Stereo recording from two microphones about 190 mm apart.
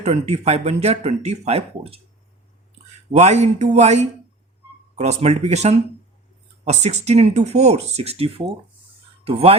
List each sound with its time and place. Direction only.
0.0 s speech: 35° right (ahead or behind)
3.1 s speech: 35° right (ahead or behind)